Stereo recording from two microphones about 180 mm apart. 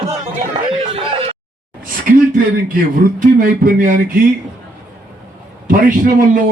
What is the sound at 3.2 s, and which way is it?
Speech, 50° right (ahead or behind).